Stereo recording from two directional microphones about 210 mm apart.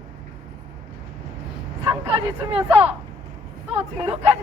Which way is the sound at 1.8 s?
20° right (ahead or behind).